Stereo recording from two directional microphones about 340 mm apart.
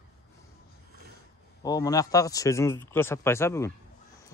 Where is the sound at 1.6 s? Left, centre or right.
Centre.